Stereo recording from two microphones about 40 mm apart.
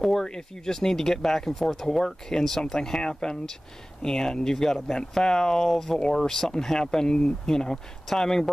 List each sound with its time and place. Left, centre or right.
0.0 s speech: centre